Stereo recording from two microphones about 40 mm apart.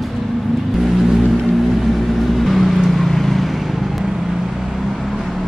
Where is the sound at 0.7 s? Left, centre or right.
Centre.